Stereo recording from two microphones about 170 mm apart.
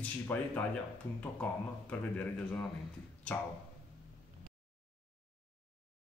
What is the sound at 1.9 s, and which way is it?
Speech, 10° left (ahead or behind).